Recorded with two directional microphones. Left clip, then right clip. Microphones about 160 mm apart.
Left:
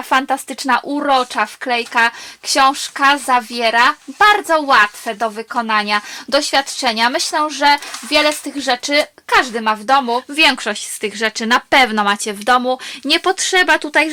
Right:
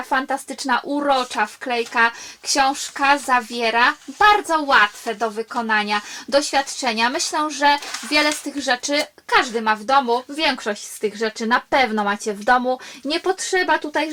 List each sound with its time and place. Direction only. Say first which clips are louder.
0.1 s speech: left 6 dB; 25° left (ahead or behind)
10.3 s a woman's voice: left 7 dB; 30° left (ahead or behind)